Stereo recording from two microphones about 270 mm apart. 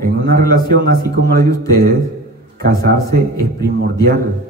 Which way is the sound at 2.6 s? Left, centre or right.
Right.